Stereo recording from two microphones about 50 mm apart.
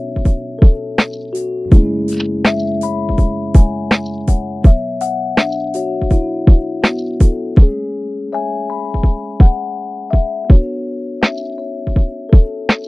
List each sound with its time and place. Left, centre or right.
0.2 s music: centre
9.4 s music: centre
11.9 s music: centre